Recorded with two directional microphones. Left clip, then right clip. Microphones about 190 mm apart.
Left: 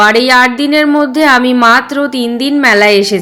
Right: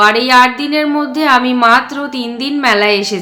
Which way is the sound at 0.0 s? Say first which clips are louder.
Left 1 dB; 35° left (ahead or behind).